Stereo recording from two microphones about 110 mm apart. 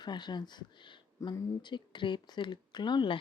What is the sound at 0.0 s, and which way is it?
Speech, 40° left (ahead or behind).